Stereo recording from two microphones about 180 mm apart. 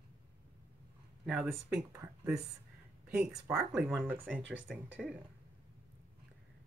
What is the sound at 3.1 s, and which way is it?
Speech, 5° right (ahead or behind).